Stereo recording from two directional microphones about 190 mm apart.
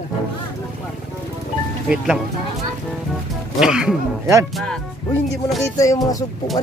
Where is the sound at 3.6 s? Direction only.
5° right (ahead or behind).